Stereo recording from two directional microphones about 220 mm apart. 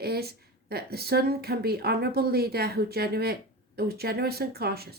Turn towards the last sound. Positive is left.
turn(degrees=-45)  # may be behind; listen again after turning